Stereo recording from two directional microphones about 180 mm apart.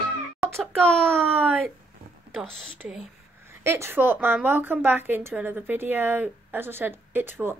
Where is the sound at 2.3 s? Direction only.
5° right (ahead or behind).